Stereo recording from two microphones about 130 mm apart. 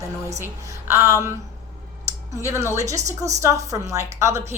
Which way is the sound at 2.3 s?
20° right (ahead or behind).